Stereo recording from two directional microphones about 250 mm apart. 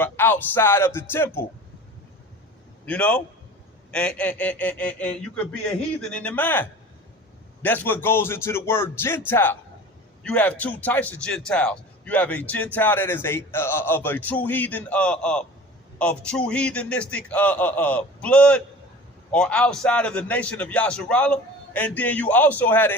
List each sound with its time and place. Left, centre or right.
0.0 s a man's voice: centre
2.8 s a man's voice: centre